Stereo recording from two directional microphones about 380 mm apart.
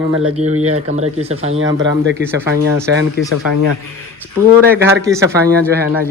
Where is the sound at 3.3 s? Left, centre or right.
Left.